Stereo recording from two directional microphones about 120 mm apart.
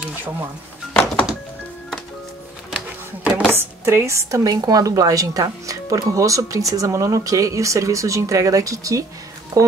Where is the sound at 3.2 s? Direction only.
10° right (ahead or behind).